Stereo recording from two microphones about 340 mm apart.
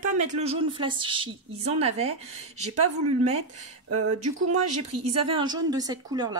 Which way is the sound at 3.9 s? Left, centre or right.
Right.